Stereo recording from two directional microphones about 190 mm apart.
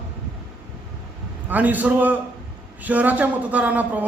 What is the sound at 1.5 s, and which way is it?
Speech, 10° right (ahead or behind).